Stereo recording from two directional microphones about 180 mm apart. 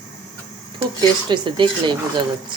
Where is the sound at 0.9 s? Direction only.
25° right (ahead or behind).